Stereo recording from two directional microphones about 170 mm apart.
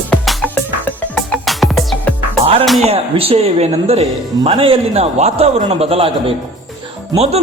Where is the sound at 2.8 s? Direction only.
35° right (ahead or behind).